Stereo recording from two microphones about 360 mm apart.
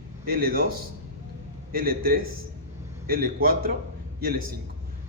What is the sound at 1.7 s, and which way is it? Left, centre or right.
A man's voice, right.